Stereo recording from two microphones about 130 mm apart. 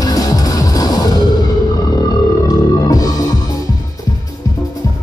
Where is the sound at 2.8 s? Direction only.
30° left (ahead or behind).